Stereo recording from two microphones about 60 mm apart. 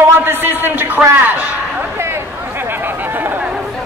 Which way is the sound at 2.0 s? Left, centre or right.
Right.